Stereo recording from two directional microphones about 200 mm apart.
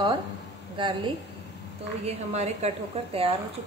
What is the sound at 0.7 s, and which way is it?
A woman's voice, 25° right (ahead or behind).